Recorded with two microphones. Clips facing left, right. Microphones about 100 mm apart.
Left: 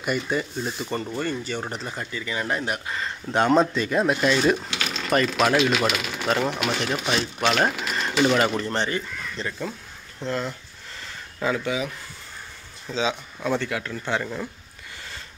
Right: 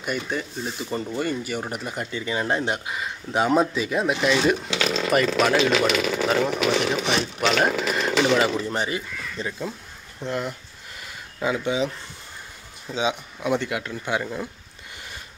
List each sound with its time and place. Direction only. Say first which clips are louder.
0.0 s speech: left 2 dB; centre (ahead or behind)
1.1 s speech: right 1 dB; 10° right (ahead or behind)
2.9 s speech: left 1 dB; 5° right (ahead or behind)
7.6 s a sound: right 2 dB; 5° right (ahead or behind)
8.4 s speech: even; 5° right (ahead or behind)